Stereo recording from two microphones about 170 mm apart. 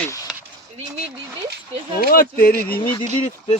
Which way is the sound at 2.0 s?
60° left (ahead or behind).